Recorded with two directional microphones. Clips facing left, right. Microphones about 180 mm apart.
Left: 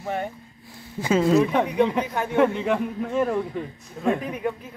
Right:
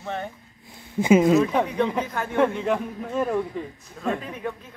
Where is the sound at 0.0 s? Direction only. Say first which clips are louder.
Left 3 dB; 10° left (ahead or behind).